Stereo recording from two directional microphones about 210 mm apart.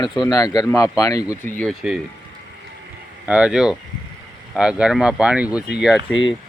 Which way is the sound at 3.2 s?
5° right (ahead or behind).